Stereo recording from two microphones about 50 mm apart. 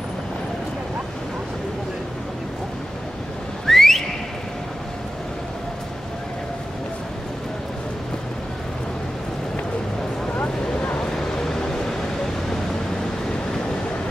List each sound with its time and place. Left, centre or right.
3.6 s whistling: centre
10.6 s vehicle: left
11.3 s vehicle: centre